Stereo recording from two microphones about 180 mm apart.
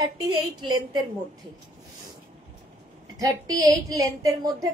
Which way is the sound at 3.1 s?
20° right (ahead or behind).